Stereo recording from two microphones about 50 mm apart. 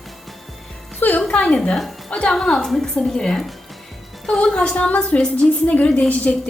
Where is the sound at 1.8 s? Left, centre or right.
Centre.